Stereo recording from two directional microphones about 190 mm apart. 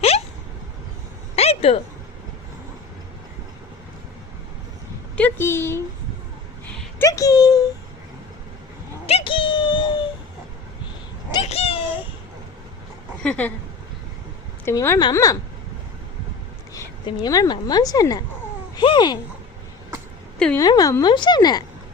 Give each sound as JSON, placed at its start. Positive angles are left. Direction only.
{"t": 1.4, "sound": "a sound", "side_deg": 30}
{"t": 5.1, "sound": "speech", "side_deg": 10}
{"t": 7.0, "sound": "speech", "side_deg": 15}
{"t": 9.0, "sound": "a sound", "side_deg": 30}
{"t": 11.4, "sound": "a sound", "side_deg": 30}
{"t": 13.2, "sound": "speech", "side_deg": 5}
{"t": 14.6, "sound": "speech", "side_deg": 15}
{"t": 17.1, "sound": "speech", "side_deg": 20}
{"t": 20.6, "sound": "speech", "side_deg": 20}